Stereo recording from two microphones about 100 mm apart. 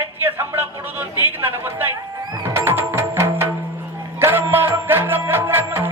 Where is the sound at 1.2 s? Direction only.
20° right (ahead or behind).